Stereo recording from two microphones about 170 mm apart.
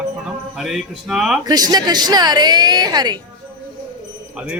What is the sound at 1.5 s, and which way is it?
A woman's voice, 25° right (ahead or behind).